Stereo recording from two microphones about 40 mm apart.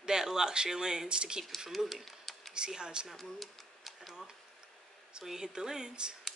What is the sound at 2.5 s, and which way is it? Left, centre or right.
Speech, right.